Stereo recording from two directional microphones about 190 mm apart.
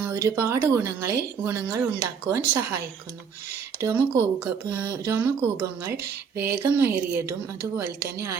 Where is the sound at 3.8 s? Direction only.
10° right (ahead or behind).